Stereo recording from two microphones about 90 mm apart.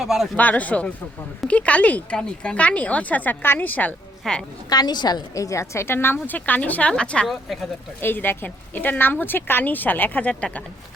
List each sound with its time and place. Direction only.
0.0 s speech: 5° right (ahead or behind)
0.3 s speech: 15° left (ahead or behind)
4.2 s a woman's voice: 10° left (ahead or behind)
4.7 s a woman's voice: 50° left (ahead or behind); by 7.3 s 10° left (ahead or behind)
7.3 s speech: centre (ahead or behind)
8.0 s a woman's voice: 25° left (ahead or behind)